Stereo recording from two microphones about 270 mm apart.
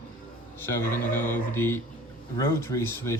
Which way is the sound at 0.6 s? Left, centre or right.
Centre.